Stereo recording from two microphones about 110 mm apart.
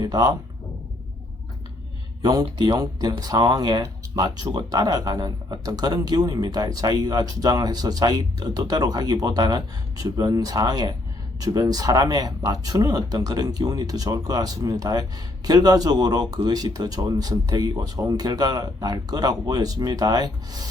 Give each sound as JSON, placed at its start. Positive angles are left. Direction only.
{"t": 0.0, "sound": "speech", "side_deg": -35}
{"t": 2.6, "sound": "speech", "side_deg": -40}